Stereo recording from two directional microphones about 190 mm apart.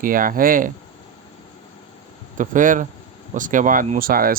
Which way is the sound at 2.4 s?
45° right (ahead or behind).